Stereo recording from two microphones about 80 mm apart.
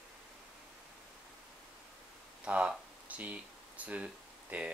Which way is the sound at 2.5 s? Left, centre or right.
Centre.